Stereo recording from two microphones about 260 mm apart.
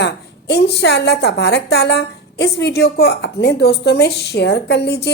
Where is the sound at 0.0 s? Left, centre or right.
Left.